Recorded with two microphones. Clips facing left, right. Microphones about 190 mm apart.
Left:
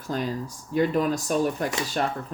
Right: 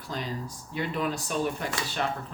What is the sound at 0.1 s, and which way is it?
Speech, 50° left (ahead or behind).